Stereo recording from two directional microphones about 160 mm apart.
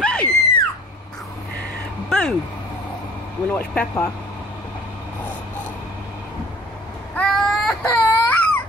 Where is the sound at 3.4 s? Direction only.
10° left (ahead or behind).